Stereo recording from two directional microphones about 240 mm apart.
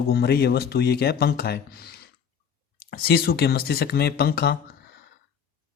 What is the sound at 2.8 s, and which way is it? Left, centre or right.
A man's voice, left.